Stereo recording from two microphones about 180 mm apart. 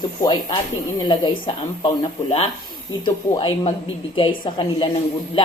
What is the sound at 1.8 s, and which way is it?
A woman's voice, 35° left (ahead or behind).